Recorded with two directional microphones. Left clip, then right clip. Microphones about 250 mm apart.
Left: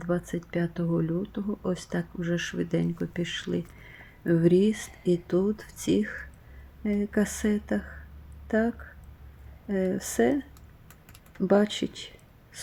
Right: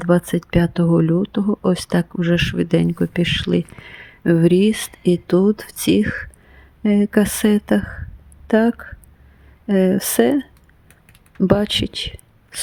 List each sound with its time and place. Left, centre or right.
0.0 s speech: right